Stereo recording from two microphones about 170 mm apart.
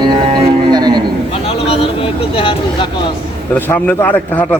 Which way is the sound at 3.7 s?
10° left (ahead or behind).